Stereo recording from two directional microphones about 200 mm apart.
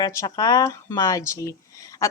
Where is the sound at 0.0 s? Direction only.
15° left (ahead or behind).